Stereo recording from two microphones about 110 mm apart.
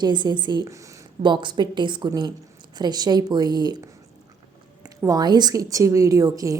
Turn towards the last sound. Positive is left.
turn(degrees=-30)  # may be behind; listen again after turning